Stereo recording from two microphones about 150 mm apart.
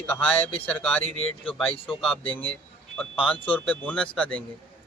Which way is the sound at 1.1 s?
35° left (ahead or behind).